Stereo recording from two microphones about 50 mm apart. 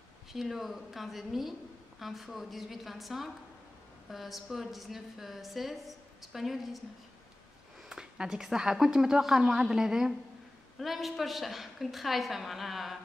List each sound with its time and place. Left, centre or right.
0.3 s a woman's voice: centre
7.9 s a woman's voice: centre